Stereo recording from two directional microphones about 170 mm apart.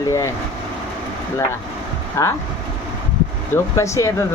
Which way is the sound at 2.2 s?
15° left (ahead or behind).